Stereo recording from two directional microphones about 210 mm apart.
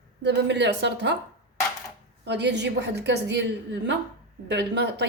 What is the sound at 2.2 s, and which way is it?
A woman's voice, 55° right (ahead or behind).